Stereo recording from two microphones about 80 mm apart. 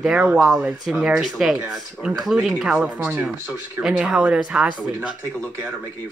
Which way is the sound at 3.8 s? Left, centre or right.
Centre.